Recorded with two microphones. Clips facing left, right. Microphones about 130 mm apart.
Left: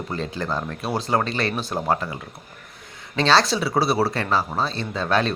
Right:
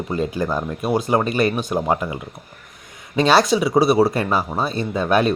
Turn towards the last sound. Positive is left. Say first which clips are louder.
# right 4 dB
turn(degrees=-15)  # may be behind; listen again after turning